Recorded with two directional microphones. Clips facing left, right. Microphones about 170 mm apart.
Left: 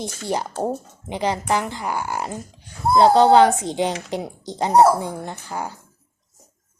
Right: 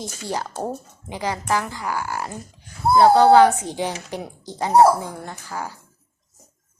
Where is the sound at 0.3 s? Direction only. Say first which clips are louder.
Left 3 dB; 20° left (ahead or behind).